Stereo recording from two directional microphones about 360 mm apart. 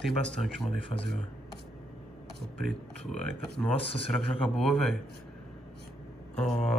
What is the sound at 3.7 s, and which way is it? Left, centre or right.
Speech, centre.